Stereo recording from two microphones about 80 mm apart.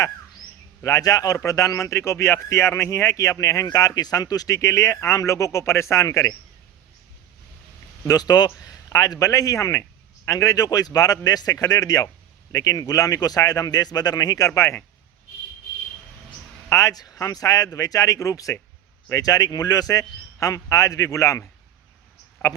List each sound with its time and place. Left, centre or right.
0.8 s a man's voice: left
8.0 s a man's voice: left
16.6 s a man's voice: left